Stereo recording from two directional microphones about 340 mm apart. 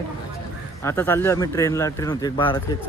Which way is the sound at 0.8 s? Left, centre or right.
Centre.